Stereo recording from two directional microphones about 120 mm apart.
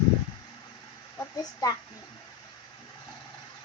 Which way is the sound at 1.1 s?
30° left (ahead or behind).